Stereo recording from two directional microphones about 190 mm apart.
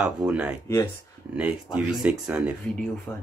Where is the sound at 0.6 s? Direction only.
15° left (ahead or behind).